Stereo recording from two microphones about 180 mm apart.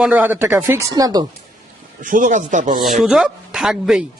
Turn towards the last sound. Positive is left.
turn(degrees=-5)  # may be behind; listen again after turning